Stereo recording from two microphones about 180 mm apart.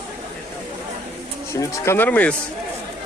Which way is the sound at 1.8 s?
10° left (ahead or behind).